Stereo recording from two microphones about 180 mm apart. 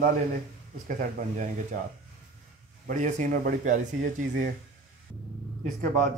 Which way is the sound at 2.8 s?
45° right (ahead or behind).